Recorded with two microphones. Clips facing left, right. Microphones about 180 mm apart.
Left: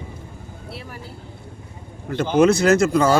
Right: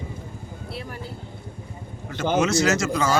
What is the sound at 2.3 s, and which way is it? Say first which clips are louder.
Speech: left 6 dB; 55° left (ahead or behind).